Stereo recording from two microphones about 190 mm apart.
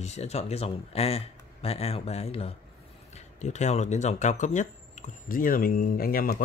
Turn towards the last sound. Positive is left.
turn(degrees=50)  # may be behind; listen again after turning